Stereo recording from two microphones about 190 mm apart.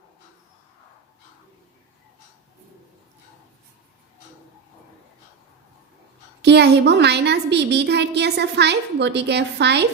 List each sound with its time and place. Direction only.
6.4 s a woman's voice: 65° right (ahead or behind)